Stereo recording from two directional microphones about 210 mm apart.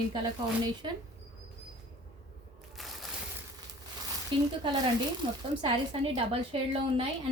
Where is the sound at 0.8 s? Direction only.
20° right (ahead or behind).